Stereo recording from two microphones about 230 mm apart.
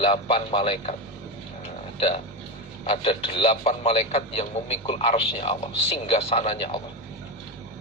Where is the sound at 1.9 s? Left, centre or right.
Left.